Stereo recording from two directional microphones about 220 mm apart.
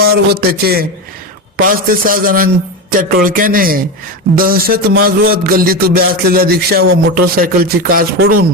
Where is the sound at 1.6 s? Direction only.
40° right (ahead or behind).